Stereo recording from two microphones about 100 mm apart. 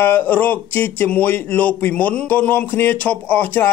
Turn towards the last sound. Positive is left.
turn(degrees=15)  # may be behind; listen again after turning